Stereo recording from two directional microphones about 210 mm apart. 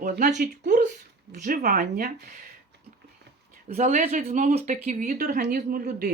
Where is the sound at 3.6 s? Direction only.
35° right (ahead or behind).